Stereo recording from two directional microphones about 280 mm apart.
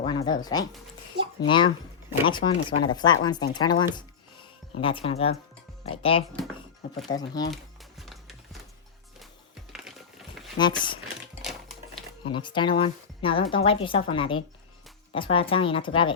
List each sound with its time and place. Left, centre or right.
0.0 s a woman's voice: centre
7.5 s music: centre
10.6 s speech: centre
12.2 s a woman's voice: centre